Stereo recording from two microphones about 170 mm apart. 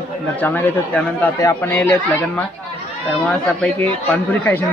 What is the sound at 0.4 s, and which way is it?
Speech, 10° left (ahead or behind).